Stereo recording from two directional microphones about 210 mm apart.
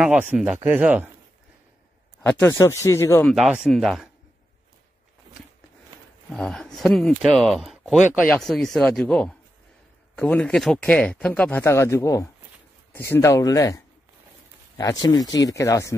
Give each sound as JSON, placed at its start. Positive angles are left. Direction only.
{"t": 0.0, "sound": "speech", "side_deg": -10}
{"t": 2.2, "sound": "speech", "side_deg": 5}
{"t": 6.3, "sound": "speech", "side_deg": 0}